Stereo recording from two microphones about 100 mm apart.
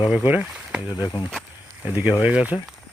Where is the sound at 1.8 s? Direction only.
20° right (ahead or behind).